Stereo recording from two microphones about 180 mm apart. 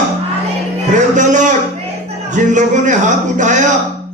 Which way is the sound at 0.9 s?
45° right (ahead or behind).